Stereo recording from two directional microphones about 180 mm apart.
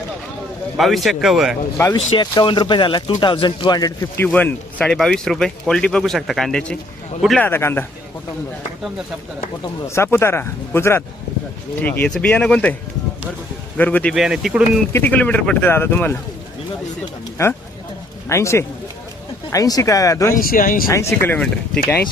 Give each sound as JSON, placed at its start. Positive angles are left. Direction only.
{"t": 0.8, "sound": "speech", "side_deg": 0}
{"t": 2.1, "sound": "speech", "side_deg": 25}
{"t": 7.4, "sound": "speech", "side_deg": 10}
{"t": 9.8, "sound": "speech", "side_deg": 15}
{"t": 13.7, "sound": "speech", "side_deg": 10}
{"t": 14.9, "sound": "speech", "side_deg": 10}
{"t": 18.3, "sound": "speech", "side_deg": 15}
{"t": 20.3, "sound": "speech", "side_deg": 50}
{"t": 20.9, "sound": "speech", "side_deg": 15}